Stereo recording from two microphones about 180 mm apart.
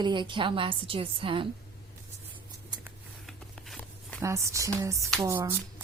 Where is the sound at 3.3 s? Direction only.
5° left (ahead or behind).